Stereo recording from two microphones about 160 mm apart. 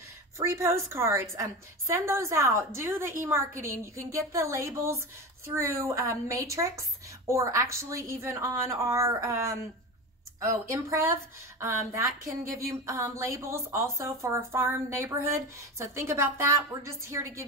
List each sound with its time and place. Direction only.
0.5 s a woman's voice: 15° right (ahead or behind)